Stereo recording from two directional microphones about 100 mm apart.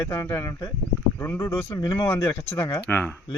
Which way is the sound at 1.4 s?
35° left (ahead or behind).